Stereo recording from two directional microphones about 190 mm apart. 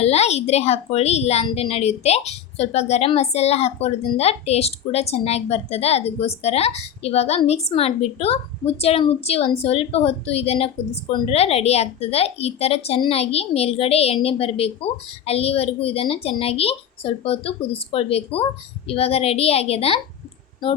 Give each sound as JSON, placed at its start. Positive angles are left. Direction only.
{"t": 0.0, "sound": "a woman's voice", "side_deg": 35}